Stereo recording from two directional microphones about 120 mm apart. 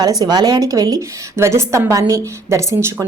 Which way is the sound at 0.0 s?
35° right (ahead or behind).